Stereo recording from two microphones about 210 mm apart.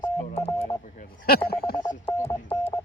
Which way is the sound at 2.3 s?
10° left (ahead or behind).